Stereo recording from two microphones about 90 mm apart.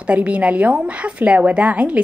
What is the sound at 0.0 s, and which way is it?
A woman's voice, 15° right (ahead or behind).